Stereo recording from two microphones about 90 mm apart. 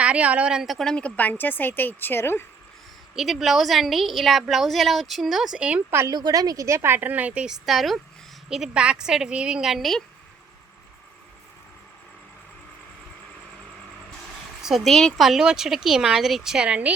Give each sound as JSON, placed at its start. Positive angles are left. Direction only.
{"t": 0.0, "sound": "a woman's voice", "side_deg": -15}
{"t": 3.2, "sound": "a woman's voice", "side_deg": 0}
{"t": 6.1, "sound": "a woman's voice", "side_deg": -45}
{"t": 14.6, "sound": "a woman's voice", "side_deg": 0}